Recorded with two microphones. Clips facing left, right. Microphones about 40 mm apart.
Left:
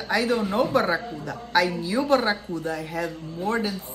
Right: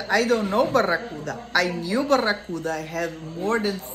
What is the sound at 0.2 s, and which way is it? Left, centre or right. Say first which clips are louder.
Speech: right 1 dB; right.